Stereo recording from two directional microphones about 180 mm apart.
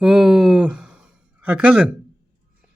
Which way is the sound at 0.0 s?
5° right (ahead or behind).